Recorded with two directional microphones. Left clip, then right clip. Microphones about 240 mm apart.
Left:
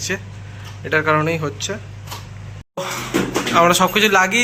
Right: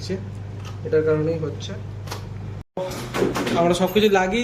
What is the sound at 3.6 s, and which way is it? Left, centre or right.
Speech, centre.